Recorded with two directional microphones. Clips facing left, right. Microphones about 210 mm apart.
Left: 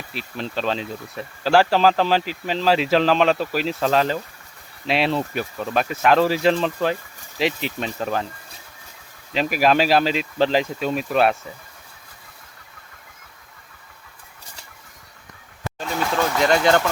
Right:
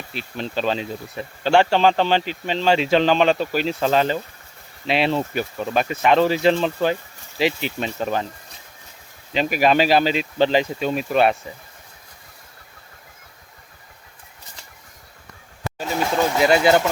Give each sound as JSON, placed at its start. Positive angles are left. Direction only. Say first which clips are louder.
{"t": 0.1, "sound": "speech", "louder": "right 1 dB", "side_deg": 0}
{"t": 9.3, "sound": "speech", "louder": "right 1 dB", "side_deg": 0}
{"t": 16.0, "sound": "vehicle", "louder": "right 2 dB", "side_deg": -20}
{"t": 16.4, "sound": "speech", "louder": "right 2 dB", "side_deg": -10}